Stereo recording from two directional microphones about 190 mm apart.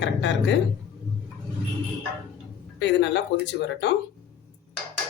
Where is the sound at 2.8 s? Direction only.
65° left (ahead or behind).